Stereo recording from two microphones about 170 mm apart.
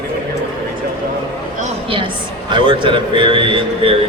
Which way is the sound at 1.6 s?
30° right (ahead or behind).